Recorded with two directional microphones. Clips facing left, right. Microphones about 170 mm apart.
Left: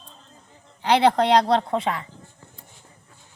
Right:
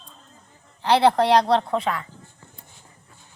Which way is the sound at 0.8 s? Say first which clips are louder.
Right 1 dB; 20° left (ahead or behind).